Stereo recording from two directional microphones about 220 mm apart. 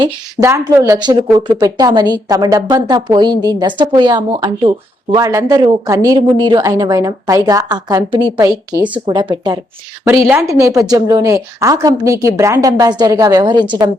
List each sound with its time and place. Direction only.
0.0 s a woman's voice: 15° right (ahead or behind)
10.2 s speech: 10° right (ahead or behind)